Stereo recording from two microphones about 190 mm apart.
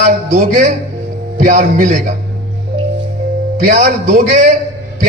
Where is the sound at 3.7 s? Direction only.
40° right (ahead or behind).